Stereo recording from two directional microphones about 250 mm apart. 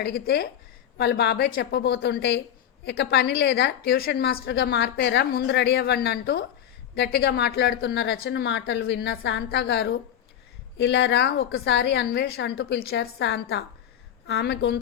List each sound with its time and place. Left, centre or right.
0.0 s a woman's voice: left